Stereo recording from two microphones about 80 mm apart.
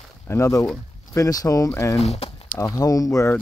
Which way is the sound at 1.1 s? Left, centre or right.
Left.